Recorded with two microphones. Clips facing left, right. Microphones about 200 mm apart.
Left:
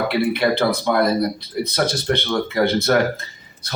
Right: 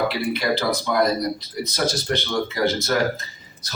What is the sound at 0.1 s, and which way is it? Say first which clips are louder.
Speech: left 4 dB; 60° left (ahead or behind).